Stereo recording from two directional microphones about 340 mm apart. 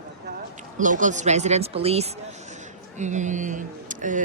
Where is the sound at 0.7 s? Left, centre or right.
Right.